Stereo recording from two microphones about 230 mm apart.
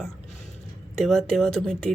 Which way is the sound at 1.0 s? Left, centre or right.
Centre.